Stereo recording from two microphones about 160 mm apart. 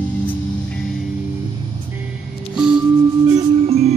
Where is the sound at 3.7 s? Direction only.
40° right (ahead or behind).